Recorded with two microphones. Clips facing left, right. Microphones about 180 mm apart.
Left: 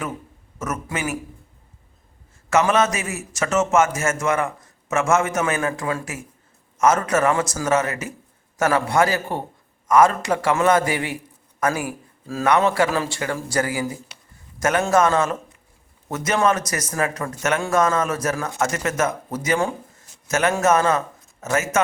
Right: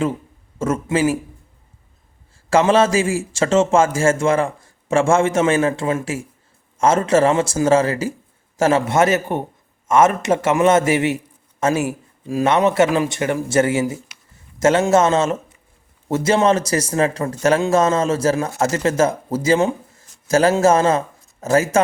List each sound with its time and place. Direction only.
0.6 s a man's voice: 30° right (ahead or behind)
2.5 s a man's voice: 30° right (ahead or behind)